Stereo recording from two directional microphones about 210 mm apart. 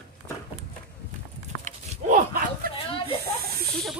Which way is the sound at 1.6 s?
35° right (ahead or behind).